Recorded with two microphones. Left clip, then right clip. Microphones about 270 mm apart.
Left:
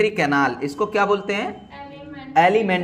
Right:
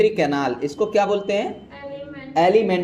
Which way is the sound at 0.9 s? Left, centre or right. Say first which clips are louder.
Even; left.